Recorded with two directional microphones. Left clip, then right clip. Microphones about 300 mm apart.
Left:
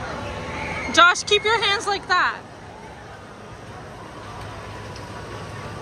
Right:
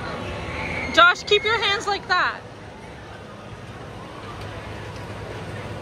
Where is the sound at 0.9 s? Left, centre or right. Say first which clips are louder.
Even; centre.